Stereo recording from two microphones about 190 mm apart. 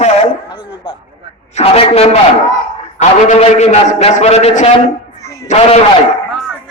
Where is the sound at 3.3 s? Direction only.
35° left (ahead or behind).